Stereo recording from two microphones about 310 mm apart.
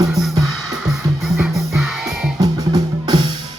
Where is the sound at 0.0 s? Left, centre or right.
Centre.